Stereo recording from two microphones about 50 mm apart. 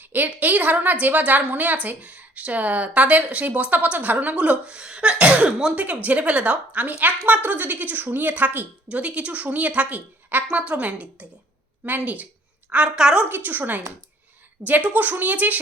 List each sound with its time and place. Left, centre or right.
0.0 s a woman's voice: right; by 5.7 s centre
5.7 s a woman's voice: right
12.7 s a woman's voice: centre
13.2 s a woman's voice: right